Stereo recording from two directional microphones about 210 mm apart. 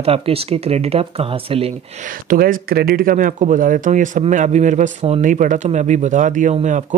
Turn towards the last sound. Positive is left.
turn(degrees=-35)  # may be behind; listen again after turning